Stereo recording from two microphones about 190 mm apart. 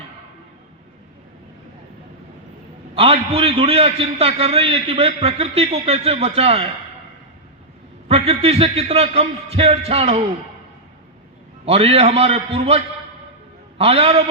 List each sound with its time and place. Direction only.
2.9 s a man's voice: 30° right (ahead or behind)
8.0 s a man's voice: 30° right (ahead or behind)
11.6 s a man's voice: 30° right (ahead or behind)